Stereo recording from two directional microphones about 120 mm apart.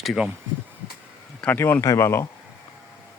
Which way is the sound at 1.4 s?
15° left (ahead or behind).